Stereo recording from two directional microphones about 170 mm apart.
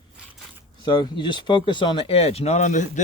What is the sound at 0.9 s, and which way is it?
Speech, 30° left (ahead or behind).